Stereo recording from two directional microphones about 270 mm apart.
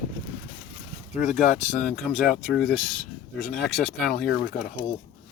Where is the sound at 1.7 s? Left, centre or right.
Left.